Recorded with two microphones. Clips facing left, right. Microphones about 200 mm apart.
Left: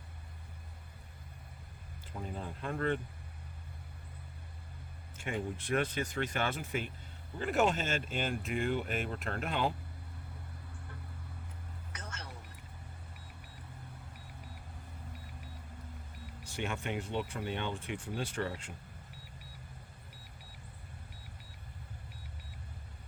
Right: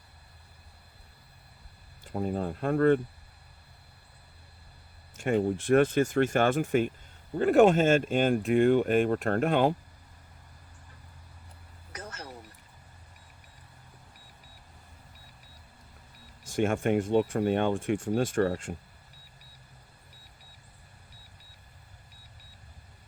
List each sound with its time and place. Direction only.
2.1 s speech: 45° right (ahead or behind)
5.1 s speech: 40° right (ahead or behind)
11.9 s vehicle: 35° right (ahead or behind)
16.5 s speech: 50° right (ahead or behind)